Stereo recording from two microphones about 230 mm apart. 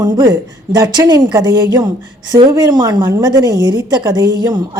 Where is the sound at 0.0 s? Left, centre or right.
Centre.